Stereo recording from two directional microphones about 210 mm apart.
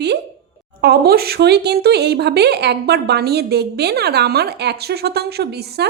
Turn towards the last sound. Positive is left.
turn(degrees=-50)  # may be behind; listen again after turning